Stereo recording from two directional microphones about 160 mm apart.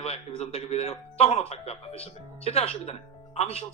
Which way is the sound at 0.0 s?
40° left (ahead or behind).